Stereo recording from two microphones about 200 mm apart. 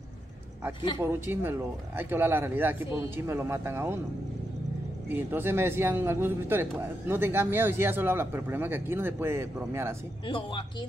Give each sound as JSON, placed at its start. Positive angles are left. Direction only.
{"t": 1.0, "sound": "speech", "side_deg": -10}
{"t": 5.1, "sound": "speech", "side_deg": -10}
{"t": 10.2, "sound": "speech", "side_deg": 25}